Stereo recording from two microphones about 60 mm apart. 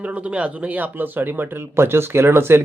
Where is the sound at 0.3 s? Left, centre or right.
Right.